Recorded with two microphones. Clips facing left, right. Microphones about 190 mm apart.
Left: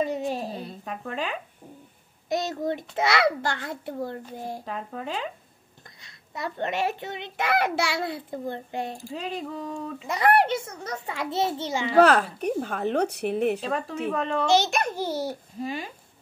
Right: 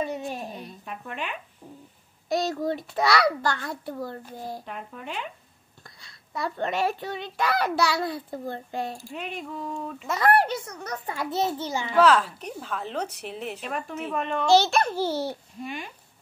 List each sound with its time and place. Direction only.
0.0 s a sound: 35° left (ahead or behind)
2.2 s a child's voice: 20° left (ahead or behind)
4.6 s speech: 35° left (ahead or behind)
5.9 s a child's voice: 20° left (ahead or behind)
9.1 s speech: 35° left (ahead or behind)
10.0 s a child's voice: 15° left (ahead or behind)
12.0 s a woman's voice: 60° left (ahead or behind)
13.6 s a child's voice: 30° left (ahead or behind)
14.4 s a child's voice: 20° left (ahead or behind)
15.6 s speech: 35° left (ahead or behind)